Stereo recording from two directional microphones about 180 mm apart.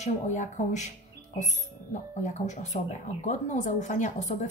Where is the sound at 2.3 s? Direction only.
40° left (ahead or behind).